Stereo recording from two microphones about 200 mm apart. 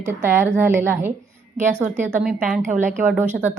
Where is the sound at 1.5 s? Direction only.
40° right (ahead or behind).